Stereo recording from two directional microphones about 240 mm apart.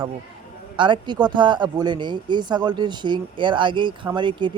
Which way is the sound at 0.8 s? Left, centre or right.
Centre.